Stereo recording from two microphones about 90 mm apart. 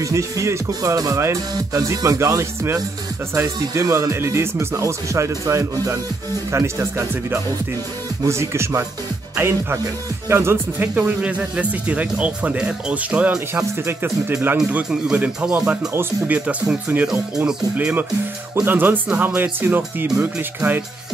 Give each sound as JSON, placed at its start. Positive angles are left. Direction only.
{"t": 0.0, "sound": "speech", "side_deg": -35}
{"t": 13.6, "sound": "speech", "side_deg": -25}
{"t": 14.7, "sound": "speech", "side_deg": -10}